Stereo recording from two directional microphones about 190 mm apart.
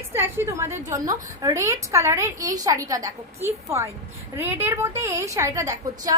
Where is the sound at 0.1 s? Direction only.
15° right (ahead or behind).